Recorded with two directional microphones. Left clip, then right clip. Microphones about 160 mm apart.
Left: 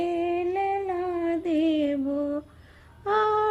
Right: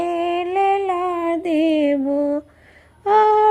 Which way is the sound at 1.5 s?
15° left (ahead or behind).